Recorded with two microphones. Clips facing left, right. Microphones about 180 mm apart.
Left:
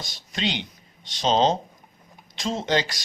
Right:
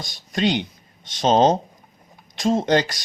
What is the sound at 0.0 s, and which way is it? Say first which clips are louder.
Speech: right 7 dB; 50° right (ahead or behind).